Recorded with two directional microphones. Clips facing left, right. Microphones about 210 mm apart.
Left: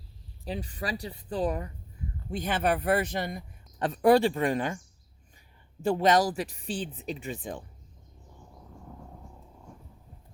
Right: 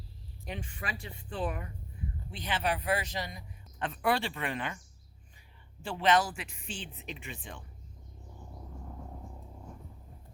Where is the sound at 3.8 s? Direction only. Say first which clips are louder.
Left 10 dB; 40° left (ahead or behind).